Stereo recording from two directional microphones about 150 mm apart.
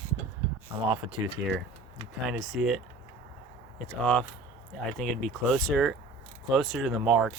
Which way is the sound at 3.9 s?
10° left (ahead or behind).